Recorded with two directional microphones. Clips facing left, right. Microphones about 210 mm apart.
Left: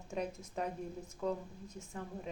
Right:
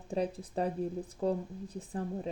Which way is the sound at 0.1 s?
35° right (ahead or behind).